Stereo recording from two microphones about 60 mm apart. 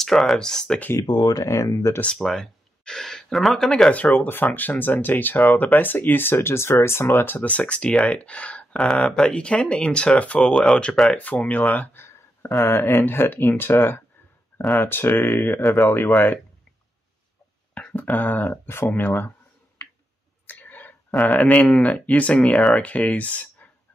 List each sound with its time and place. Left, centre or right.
0.0 s speech: centre
0.9 s speech: left
2.0 s speech: centre
3.9 s speech: left
7.3 s speech: left
10.5 s speech: centre
11.1 s speech: centre
12.0 s a sound: left
12.5 s speech: left
16.1 s speech: left
17.7 s speech: left
20.4 s a sound: left
21.1 s speech: centre
21.4 s speech: left